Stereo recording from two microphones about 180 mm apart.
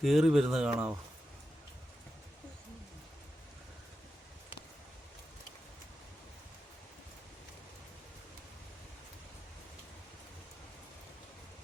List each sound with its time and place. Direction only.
0.0 s speech: centre (ahead or behind)